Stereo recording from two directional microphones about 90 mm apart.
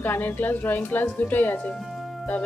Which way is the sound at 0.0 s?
25° left (ahead or behind).